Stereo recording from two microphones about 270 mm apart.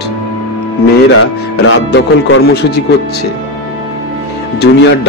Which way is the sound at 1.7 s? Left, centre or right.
Left.